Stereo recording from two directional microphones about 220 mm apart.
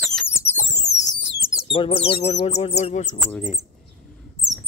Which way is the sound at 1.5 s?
20° left (ahead or behind).